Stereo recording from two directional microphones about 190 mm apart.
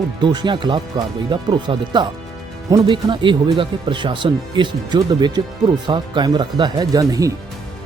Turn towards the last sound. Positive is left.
turn(degrees=-20)  # may be behind; listen again after turning